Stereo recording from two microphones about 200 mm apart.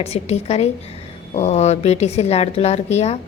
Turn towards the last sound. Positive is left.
turn(degrees=35)  # may be behind; listen again after turning